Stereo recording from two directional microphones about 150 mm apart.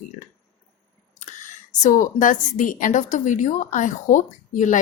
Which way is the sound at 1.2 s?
55° left (ahead or behind).